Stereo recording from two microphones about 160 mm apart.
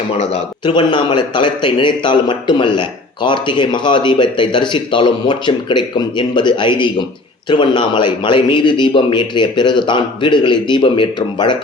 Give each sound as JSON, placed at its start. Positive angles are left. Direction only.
{"t": 0.2, "sound": "a man's voice", "side_deg": 30}